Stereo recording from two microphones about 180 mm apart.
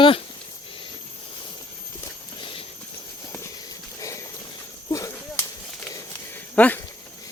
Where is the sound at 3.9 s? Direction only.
20° left (ahead or behind).